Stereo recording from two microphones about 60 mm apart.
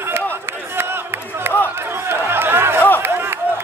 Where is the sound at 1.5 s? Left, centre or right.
Right.